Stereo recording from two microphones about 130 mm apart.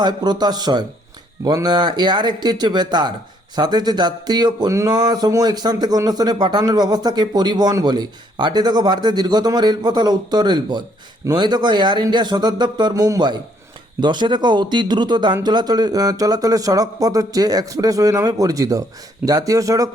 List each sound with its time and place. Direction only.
0.0 s speech: 30° right (ahead or behind)